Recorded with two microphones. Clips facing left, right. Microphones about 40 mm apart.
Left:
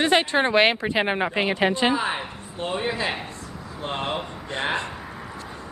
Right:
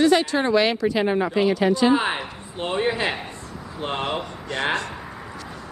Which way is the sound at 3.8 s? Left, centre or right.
Right.